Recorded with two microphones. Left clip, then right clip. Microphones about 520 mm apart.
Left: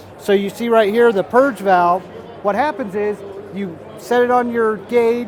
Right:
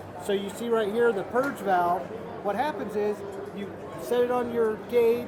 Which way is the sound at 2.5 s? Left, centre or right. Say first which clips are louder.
Left 10 dB; left.